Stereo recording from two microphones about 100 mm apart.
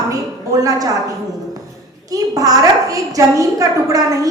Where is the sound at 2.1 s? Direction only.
35° right (ahead or behind).